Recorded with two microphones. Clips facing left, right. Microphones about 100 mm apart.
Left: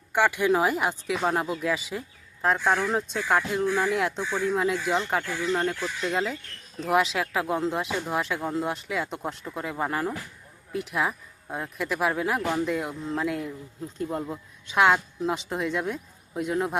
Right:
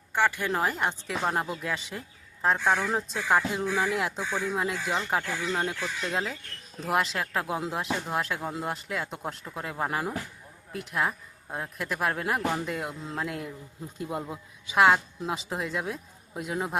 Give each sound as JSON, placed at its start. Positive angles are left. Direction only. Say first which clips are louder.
{"t": 0.1, "sound": "speech", "louder": "left 4 dB", "side_deg": 15}